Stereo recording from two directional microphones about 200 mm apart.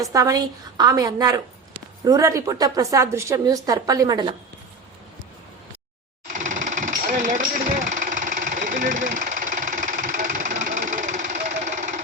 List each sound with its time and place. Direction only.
0.0 s a woman's voice: 15° right (ahead or behind)
6.3 s jackhammer: 40° right (ahead or behind)